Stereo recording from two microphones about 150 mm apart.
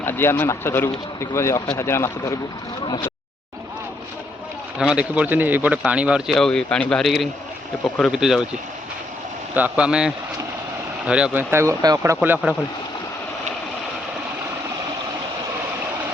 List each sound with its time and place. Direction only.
0.0 s speech: 15° left (ahead or behind)
4.8 s speech: 5° right (ahead or behind)
9.6 s speech: 10° right (ahead or behind)